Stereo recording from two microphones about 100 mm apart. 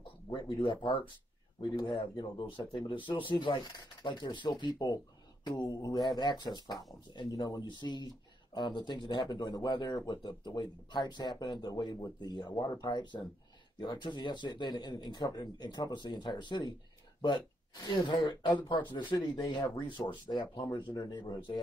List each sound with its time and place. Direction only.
0.6 s speech: 55° left (ahead or behind)
17.8 s speech: 45° left (ahead or behind)